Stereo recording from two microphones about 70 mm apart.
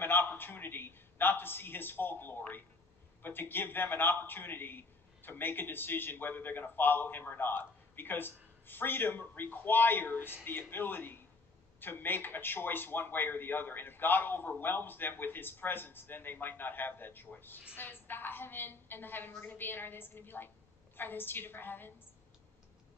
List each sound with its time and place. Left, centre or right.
0.0 s a man's voice: left